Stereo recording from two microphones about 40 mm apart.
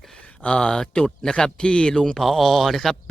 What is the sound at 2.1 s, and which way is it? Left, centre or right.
Speech, centre.